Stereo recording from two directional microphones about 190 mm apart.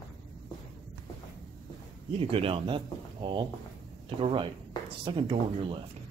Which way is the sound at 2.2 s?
30° right (ahead or behind).